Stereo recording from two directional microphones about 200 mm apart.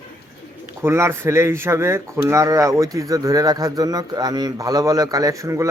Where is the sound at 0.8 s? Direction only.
15° right (ahead or behind).